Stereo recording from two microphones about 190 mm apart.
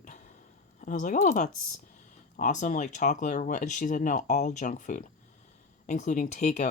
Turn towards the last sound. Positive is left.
turn(degrees=40)  # may be behind; listen again after turning